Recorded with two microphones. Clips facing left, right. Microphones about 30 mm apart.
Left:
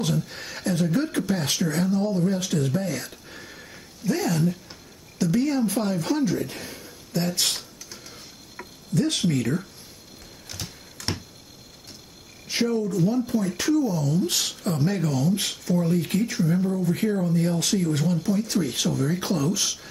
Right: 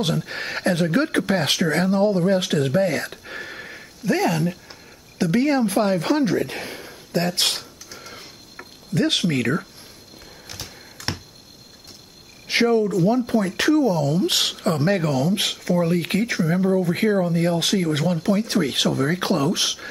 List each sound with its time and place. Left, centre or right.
0.0 s speech: right
4.0 s speech: right
5.2 s speech: right
8.9 s speech: right
10.5 s a sound: centre
12.4 s speech: right